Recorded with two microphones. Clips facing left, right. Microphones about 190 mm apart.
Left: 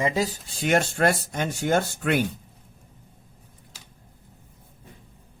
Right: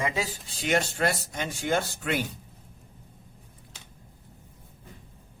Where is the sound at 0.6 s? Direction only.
50° left (ahead or behind).